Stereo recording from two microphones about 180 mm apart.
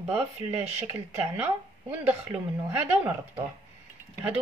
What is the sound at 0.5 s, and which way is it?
Speech, 10° right (ahead or behind).